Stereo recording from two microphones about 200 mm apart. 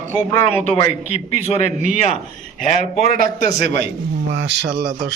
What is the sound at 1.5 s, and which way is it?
Speech, 35° right (ahead or behind).